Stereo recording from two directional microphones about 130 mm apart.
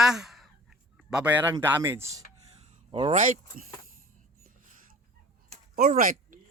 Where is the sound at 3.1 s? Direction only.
80° right.